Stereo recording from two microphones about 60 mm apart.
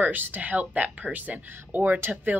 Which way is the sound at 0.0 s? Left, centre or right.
Right.